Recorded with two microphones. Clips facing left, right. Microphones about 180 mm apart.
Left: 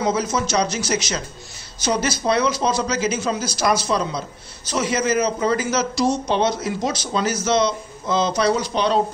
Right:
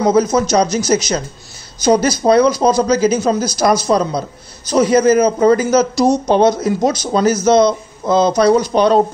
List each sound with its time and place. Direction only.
0.0 s a man's voice: 40° right (ahead or behind)